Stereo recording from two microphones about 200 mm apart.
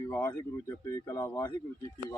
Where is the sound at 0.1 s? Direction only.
10° left (ahead or behind).